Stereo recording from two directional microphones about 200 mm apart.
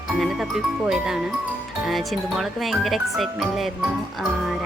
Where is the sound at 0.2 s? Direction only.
Centre (ahead or behind).